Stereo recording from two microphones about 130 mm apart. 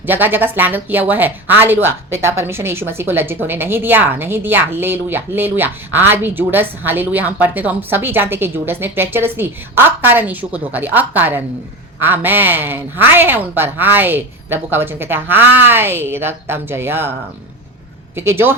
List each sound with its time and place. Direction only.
0.0 s speech: 15° right (ahead or behind)
18.2 s speech: 20° right (ahead or behind)